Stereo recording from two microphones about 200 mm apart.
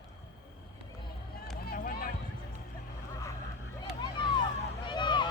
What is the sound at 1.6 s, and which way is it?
Run, 50° left (ahead or behind).